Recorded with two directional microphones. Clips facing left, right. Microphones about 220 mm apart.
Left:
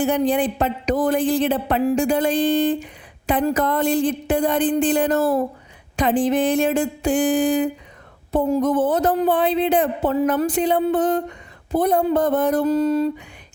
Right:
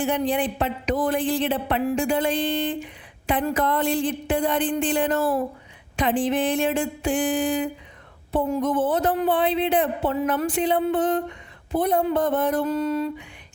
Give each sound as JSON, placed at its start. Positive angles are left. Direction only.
{"t": 0.0, "sound": "speech", "side_deg": 40}